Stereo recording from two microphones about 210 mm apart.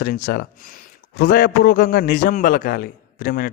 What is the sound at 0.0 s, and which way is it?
Speech, 50° left (ahead or behind).